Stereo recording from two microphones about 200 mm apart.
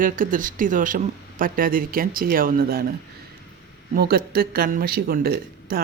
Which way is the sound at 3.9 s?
50° right (ahead or behind).